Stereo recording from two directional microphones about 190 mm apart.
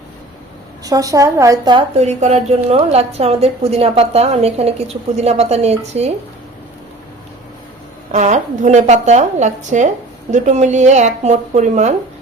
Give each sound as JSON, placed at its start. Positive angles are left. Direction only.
{"t": 0.9, "sound": "a woman's voice", "side_deg": -15}
{"t": 2.0, "sound": "a woman's voice", "side_deg": -35}
{"t": 8.1, "sound": "a woman's voice", "side_deg": -40}